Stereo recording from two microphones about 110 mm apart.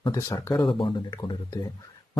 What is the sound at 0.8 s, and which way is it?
Speech, 45° left (ahead or behind).